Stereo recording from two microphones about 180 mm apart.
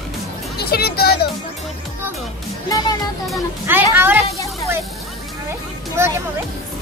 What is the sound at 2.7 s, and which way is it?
Speech, 25° left (ahead or behind).